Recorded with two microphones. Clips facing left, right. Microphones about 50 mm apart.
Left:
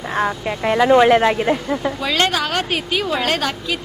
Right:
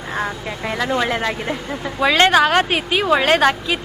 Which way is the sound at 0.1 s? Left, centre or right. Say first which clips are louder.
Left 4 dB; centre.